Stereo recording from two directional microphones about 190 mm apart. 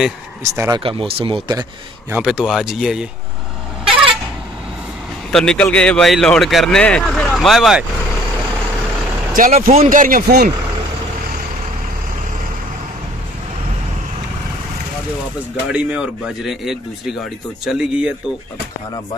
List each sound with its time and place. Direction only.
0.4 s speech: 15° right (ahead or behind)
1.5 s a man's voice: 15° right (ahead or behind)
2.1 s a man's voice: 5° right (ahead or behind)
5.3 s a man's voice: 5° left (ahead or behind)
9.3 s speech: 45° right (ahead or behind)
15.7 s a man's voice: 5° right (ahead or behind)